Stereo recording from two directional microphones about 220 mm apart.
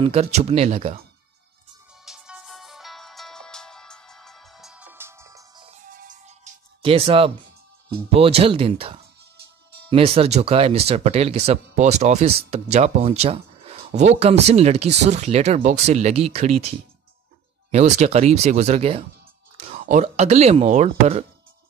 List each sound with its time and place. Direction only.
0.0 s speech: 25° right (ahead or behind)
2.0 s music: 5° right (ahead or behind)
5.7 s music: 35° right (ahead or behind)
8.1 s speech: 25° right (ahead or behind)
17.6 s speech: 30° right (ahead or behind)